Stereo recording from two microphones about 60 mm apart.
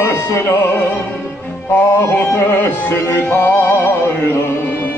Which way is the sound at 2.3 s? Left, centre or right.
Left.